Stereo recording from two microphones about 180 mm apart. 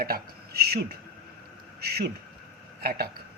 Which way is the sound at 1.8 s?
60° right (ahead or behind).